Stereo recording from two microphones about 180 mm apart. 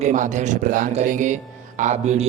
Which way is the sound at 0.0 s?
45° right (ahead or behind).